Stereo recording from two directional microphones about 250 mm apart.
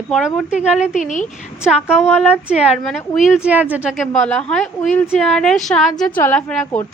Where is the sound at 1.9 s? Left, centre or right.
Centre.